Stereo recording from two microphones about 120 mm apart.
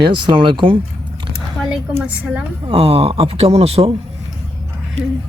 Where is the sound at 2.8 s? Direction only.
55° right (ahead or behind).